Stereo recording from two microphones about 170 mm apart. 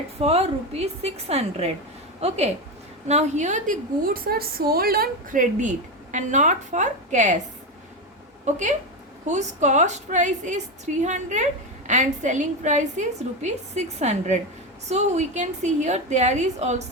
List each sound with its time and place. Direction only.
0.2 s a woman's voice: 35° right (ahead or behind)
8.5 s a woman's voice: 45° right (ahead or behind)